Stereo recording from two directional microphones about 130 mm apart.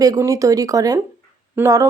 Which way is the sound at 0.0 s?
25° right (ahead or behind).